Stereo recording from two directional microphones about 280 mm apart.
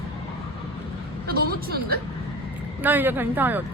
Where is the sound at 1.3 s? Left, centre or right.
Right.